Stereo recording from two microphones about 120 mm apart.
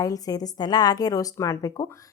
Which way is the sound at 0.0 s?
30° left (ahead or behind).